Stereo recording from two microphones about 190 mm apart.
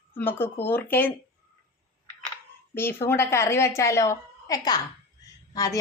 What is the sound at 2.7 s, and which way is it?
A woman's voice, 10° left (ahead or behind).